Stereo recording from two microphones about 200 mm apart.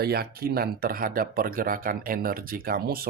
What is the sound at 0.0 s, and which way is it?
Speech, 50° right (ahead or behind).